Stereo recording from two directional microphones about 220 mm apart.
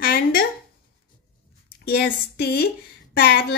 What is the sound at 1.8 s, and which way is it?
A woman's voice, 50° left (ahead or behind).